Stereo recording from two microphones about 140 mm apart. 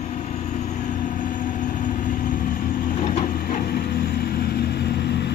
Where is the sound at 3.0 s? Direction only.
55° left (ahead or behind).